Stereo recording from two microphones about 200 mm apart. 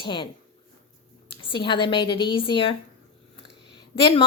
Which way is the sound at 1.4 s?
25° left (ahead or behind).